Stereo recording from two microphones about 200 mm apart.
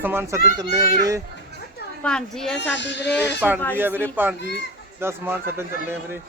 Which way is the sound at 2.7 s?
65° left (ahead or behind).